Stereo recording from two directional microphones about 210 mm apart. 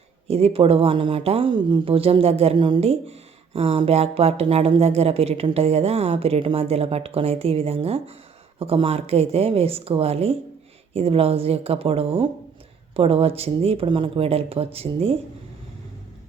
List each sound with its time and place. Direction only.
0.3 s speech: 30° right (ahead or behind)